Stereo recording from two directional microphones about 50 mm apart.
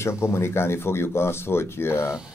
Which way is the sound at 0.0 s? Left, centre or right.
Left.